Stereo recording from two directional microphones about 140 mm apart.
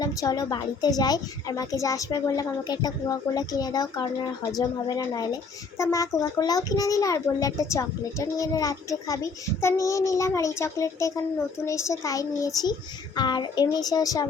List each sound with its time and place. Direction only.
0.0 s a child's voice: 25° left (ahead or behind)